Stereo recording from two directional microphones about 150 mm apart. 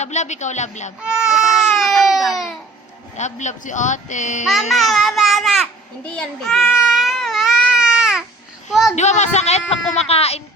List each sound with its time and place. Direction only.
0.0 s speech: 50° left (ahead or behind)
1.0 s baby cry: 5° right (ahead or behind)
3.2 s speech: 55° left (ahead or behind)
4.7 s babbling: centre (ahead or behind)
6.1 s a child's voice: centre (ahead or behind)
6.8 s baby cry: centre (ahead or behind)
9.0 s speech: 50° left (ahead or behind)